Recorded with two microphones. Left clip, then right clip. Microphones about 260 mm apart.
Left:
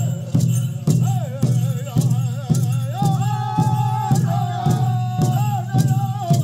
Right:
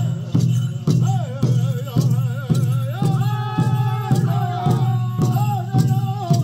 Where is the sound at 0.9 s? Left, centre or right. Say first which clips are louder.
Right 1 dB; left.